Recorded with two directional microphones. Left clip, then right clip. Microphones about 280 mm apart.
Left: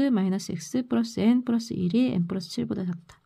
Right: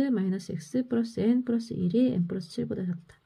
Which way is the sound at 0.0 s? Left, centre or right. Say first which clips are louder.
Left 3 dB; left.